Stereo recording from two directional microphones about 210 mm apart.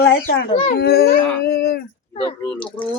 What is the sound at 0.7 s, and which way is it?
Speech, 50° left (ahead or behind).